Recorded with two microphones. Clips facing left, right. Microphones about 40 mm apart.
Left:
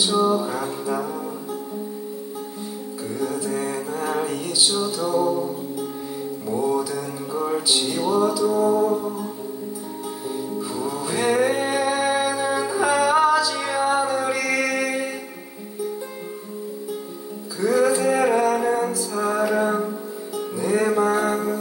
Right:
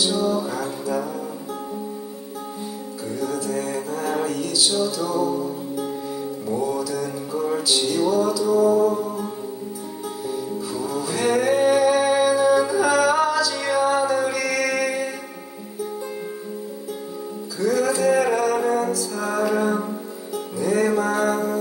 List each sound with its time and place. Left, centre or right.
0.2 s music: left
3.2 s music: centre
10.7 s music: centre
14.4 s mantra: centre
17.6 s music: centre